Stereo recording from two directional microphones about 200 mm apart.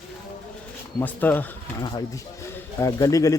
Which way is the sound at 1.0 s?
10° left (ahead or behind).